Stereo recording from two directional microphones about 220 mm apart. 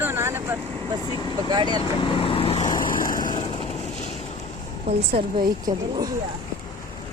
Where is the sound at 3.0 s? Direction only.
40° left (ahead or behind).